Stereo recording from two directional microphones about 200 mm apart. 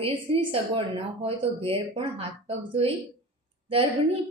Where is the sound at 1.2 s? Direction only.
30° right (ahead or behind).